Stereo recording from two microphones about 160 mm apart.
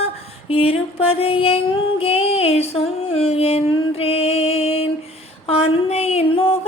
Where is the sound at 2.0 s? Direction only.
40° left (ahead or behind).